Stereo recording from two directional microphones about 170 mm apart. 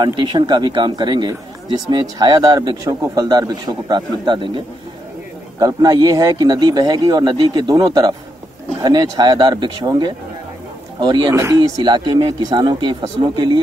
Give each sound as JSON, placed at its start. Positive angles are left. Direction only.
{"t": 0.0, "sound": "a man's voice", "side_deg": -30}
{"t": 5.6, "sound": "a man's voice", "side_deg": -20}